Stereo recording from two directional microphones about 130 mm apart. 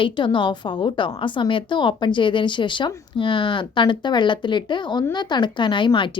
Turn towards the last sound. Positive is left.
turn(degrees=40)  # may be behind; listen again after turning